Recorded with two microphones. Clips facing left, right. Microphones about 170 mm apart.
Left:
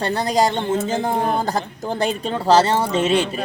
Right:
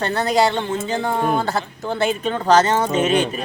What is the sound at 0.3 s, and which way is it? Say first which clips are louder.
A man's voice: even; 40° left (ahead or behind).